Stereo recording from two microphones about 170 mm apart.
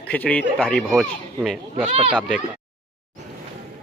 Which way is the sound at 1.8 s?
35° right (ahead or behind).